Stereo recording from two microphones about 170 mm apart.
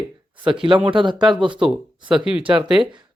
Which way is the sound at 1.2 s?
5° right (ahead or behind).